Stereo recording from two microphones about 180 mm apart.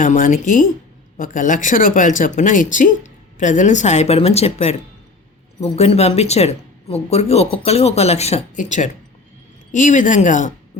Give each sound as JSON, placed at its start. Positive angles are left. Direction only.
{"t": 0.0, "sound": "speech", "side_deg": 45}